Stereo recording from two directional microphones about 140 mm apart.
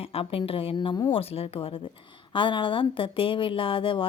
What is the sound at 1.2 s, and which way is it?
A woman's voice, 45° left (ahead or behind).